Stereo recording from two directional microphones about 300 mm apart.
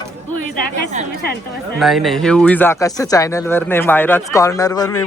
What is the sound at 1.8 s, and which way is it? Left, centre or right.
Speech, centre.